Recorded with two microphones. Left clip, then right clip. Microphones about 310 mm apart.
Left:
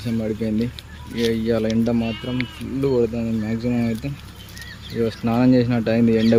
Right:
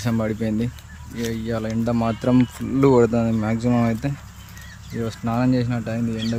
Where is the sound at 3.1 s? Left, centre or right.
Centre.